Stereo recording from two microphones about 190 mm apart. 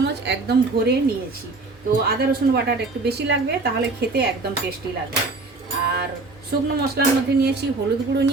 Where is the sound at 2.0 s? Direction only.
55° right (ahead or behind).